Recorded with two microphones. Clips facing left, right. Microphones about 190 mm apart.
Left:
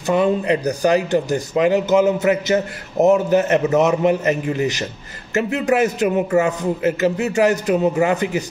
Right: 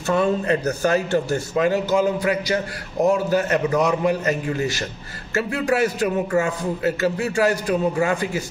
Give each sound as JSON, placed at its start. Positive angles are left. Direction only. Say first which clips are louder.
{"t": 0.0, "sound": "speech", "louder": "left 3 dB", "side_deg": 15}